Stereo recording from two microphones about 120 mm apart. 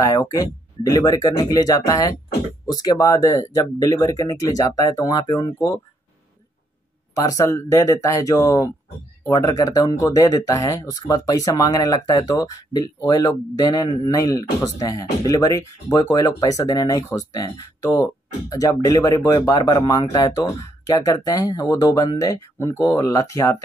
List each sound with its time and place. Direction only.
0.0 s speech: 30° left (ahead or behind)
7.2 s speech: 30° left (ahead or behind)